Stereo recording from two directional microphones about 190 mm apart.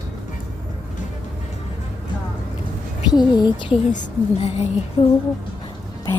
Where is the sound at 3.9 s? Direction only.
40° left (ahead or behind).